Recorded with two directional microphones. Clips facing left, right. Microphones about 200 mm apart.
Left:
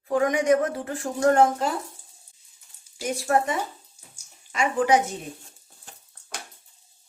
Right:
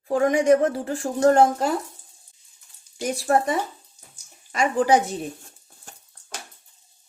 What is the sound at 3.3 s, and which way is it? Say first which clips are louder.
Speech: right 2 dB; 30° right (ahead or behind).